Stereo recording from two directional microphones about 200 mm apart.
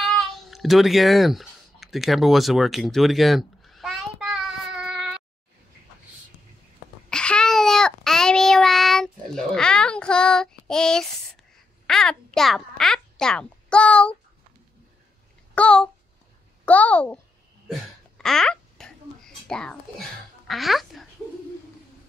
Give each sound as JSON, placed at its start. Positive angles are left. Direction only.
{"t": 0.0, "sound": "a sound", "side_deg": 0}
{"t": 7.1, "sound": "child singing", "side_deg": 5}
{"t": 11.8, "sound": "a child's voice", "side_deg": 5}
{"t": 15.5, "sound": "a child's voice", "side_deg": 5}
{"t": 17.6, "sound": "a sound", "side_deg": 0}
{"t": 20.4, "sound": "speech", "side_deg": 0}